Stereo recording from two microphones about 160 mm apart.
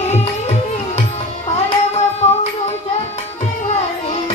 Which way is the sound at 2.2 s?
40° left (ahead or behind).